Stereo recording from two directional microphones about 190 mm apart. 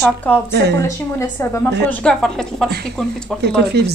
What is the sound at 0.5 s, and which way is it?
Speech, 65° right (ahead or behind).